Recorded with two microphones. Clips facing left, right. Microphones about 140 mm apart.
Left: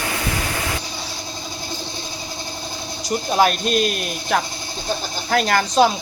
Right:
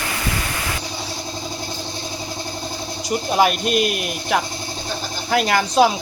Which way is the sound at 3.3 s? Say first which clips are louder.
Even; 5° right (ahead or behind).